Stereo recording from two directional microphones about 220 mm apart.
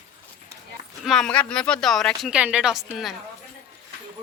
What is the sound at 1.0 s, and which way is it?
A woman's voice, centre (ahead or behind).